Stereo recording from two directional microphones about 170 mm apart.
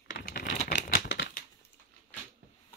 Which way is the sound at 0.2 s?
60° left (ahead or behind).